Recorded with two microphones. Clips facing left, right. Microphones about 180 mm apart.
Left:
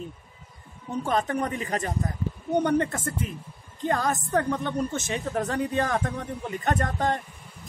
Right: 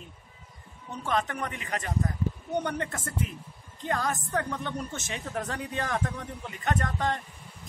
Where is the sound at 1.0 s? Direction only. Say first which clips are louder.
Left 3 dB; 35° left (ahead or behind).